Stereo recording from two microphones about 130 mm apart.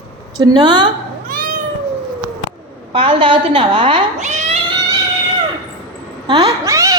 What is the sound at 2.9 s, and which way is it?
A woman's voice, 40° right (ahead or behind).